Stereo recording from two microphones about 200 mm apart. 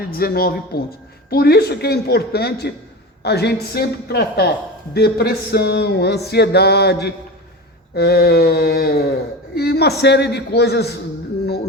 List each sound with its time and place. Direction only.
0.0 s speech: 50° left (ahead or behind)
4.9 s music: 55° left (ahead or behind)
7.9 s speech: 50° left (ahead or behind)
10.0 s music: 55° left (ahead or behind)